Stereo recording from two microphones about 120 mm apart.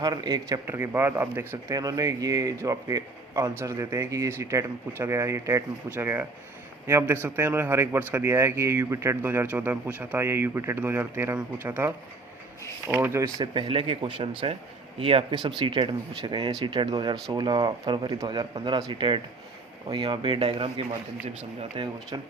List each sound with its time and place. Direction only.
0.0 s speech: 35° right (ahead or behind)
1.7 s speech: 30° right (ahead or behind)
13.4 s speech: 40° right (ahead or behind)